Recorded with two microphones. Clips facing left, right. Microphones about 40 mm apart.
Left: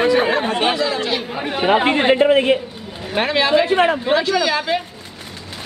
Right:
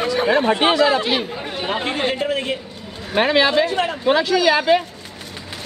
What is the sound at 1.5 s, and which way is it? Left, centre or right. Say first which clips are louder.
A man's voice: left 13 dB; left.